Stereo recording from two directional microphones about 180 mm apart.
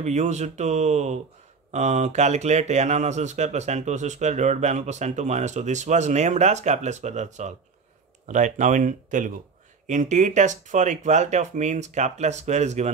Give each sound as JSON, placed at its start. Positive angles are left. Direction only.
{"t": 0.0, "sound": "speech", "side_deg": -40}